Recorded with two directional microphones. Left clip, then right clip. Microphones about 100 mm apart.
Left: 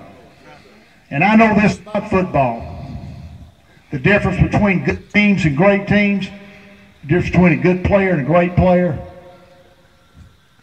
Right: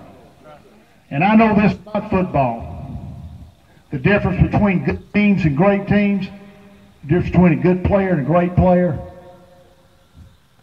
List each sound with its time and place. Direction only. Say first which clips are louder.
1.0 s a man's voice: left 2 dB; 25° left (ahead or behind)